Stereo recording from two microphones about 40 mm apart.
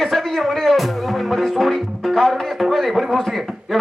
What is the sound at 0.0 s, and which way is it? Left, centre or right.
Music, centre.